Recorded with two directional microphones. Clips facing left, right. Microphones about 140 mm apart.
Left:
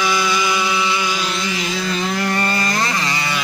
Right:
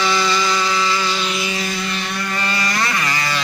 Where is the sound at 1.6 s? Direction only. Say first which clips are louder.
Left 3 dB; 90° left.